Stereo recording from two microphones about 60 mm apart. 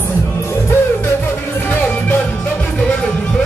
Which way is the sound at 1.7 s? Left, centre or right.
Left.